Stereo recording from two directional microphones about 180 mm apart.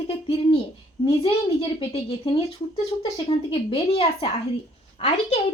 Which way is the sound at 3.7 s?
30° left (ahead or behind).